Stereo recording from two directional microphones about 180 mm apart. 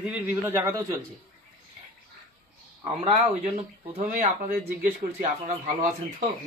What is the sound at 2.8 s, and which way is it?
Speech, 30° right (ahead or behind).